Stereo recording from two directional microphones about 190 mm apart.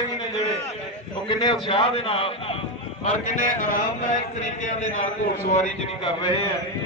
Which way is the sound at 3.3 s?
45° left (ahead or behind).